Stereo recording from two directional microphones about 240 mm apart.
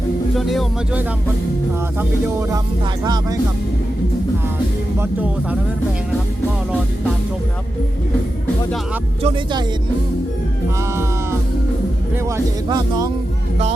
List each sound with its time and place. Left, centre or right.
0.3 s speech: centre
9.2 s speech: centre
12.6 s speech: centre